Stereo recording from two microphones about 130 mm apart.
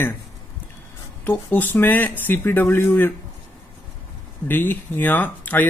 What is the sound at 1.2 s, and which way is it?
Speech, 15° left (ahead or behind).